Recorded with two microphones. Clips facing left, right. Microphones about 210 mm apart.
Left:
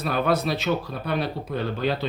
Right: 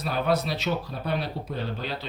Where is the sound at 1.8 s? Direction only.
55° left (ahead or behind).